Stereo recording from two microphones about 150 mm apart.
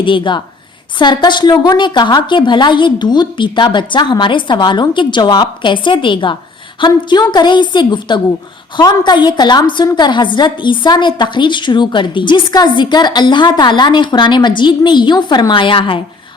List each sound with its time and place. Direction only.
0.0 s a woman's voice: 35° left (ahead or behind)